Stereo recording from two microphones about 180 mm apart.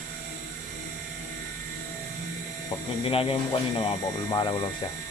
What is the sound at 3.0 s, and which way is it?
Speech, 30° left (ahead or behind).